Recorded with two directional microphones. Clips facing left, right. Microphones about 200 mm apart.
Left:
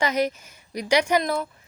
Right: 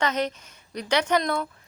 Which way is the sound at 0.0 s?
10° left (ahead or behind).